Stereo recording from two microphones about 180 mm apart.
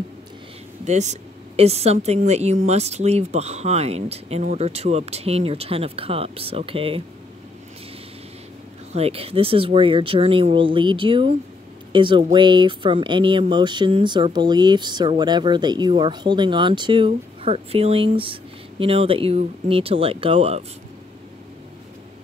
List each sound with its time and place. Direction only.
0.8 s speech: 40° right (ahead or behind)
8.9 s speech: 35° right (ahead or behind)